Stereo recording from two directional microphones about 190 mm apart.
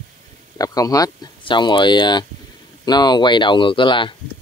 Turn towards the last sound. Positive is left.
turn(degrees=25)  # may be behind; listen again after turning